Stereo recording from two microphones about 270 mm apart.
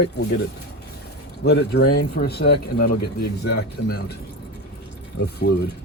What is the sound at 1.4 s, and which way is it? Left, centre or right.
Speech, left.